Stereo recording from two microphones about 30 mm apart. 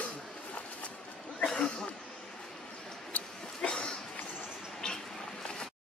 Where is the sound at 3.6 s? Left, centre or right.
Left.